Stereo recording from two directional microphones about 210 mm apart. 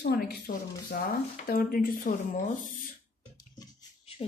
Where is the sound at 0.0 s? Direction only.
45° left (ahead or behind).